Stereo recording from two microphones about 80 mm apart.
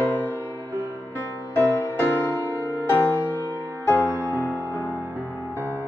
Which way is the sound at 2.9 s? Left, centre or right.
Left.